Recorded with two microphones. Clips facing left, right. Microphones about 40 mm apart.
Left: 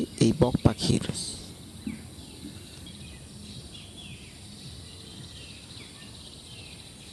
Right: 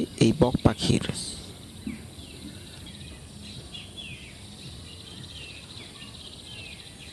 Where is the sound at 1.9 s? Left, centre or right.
Centre.